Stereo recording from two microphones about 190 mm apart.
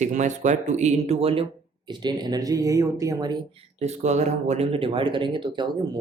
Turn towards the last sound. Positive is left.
turn(degrees=-25)  # may be behind; listen again after turning